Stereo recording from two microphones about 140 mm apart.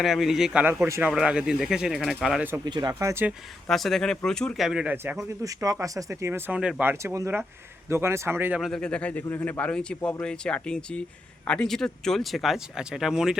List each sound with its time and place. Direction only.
0.0 s speech: centre (ahead or behind)
2.6 s speech: 30° right (ahead or behind)
3.7 s speech: centre (ahead or behind)
5.4 s speech: 25° right (ahead or behind); by 6.9 s 10° right (ahead or behind)
7.0 s speech: 20° right (ahead or behind)
8.6 s speech: 5° left (ahead or behind)